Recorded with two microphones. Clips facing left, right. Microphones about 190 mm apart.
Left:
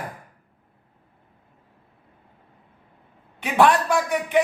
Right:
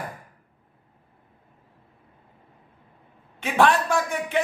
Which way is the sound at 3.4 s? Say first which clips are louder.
Left 2 dB; 15° left (ahead or behind).